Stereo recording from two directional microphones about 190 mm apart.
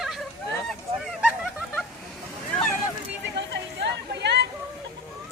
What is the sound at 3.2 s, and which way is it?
Chatter, 65° right (ahead or behind).